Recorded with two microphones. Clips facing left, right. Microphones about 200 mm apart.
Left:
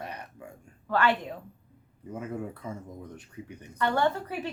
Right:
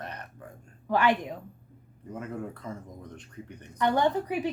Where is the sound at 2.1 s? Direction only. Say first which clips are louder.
Left 1 dB; 10° left (ahead or behind).